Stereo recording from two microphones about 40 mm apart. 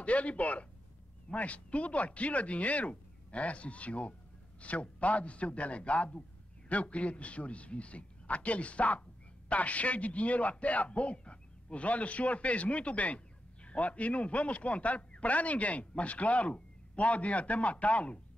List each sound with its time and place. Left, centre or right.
0.0 s speech: left